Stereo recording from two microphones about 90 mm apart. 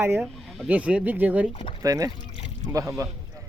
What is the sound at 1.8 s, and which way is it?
Speech, 40° right (ahead or behind).